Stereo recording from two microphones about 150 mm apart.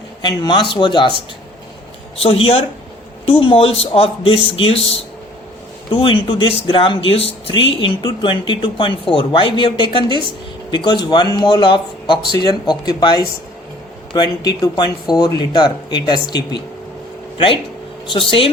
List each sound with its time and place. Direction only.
0.2 s speech: 30° left (ahead or behind)
2.1 s speech: 40° left (ahead or behind)
5.9 s speech: 35° left (ahead or behind)
18.0 s speech: 35° left (ahead or behind)